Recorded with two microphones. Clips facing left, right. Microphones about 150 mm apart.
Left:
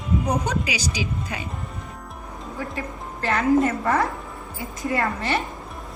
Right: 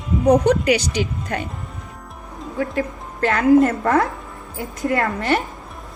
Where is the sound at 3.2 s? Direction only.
60° right (ahead or behind).